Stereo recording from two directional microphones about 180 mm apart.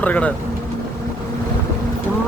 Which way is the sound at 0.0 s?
5° left (ahead or behind).